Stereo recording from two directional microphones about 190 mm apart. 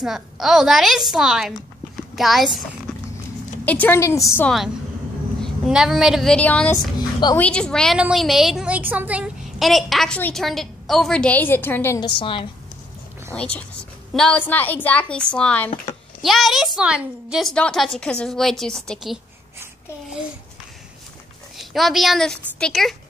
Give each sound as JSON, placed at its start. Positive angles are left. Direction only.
{"t": 0.0, "sound": "a woman's voice", "side_deg": 0}
{"t": 2.9, "sound": "a sound", "side_deg": 5}
{"t": 3.6, "sound": "a woman's voice", "side_deg": 10}
{"t": 5.4, "sound": "a woman's voice", "side_deg": 0}
{"t": 7.0, "sound": "a woman's voice", "side_deg": 20}
{"t": 7.3, "sound": "a woman's voice", "side_deg": 5}
{"t": 12.2, "sound": "a woman's voice", "side_deg": 25}
{"t": 13.3, "sound": "a woman's voice", "side_deg": 5}
{"t": 21.5, "sound": "a woman's voice", "side_deg": 0}